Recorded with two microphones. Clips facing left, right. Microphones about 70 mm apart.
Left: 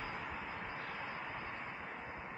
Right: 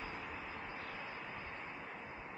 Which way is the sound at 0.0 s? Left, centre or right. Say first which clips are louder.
Left 2 dB; left.